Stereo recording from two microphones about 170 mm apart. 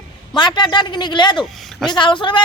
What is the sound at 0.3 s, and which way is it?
Speech, 25° left (ahead or behind).